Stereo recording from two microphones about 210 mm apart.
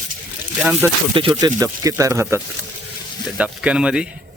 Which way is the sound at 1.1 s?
25° right (ahead or behind).